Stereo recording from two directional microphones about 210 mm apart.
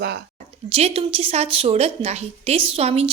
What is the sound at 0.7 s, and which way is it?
A woman's voice, 30° right (ahead or behind).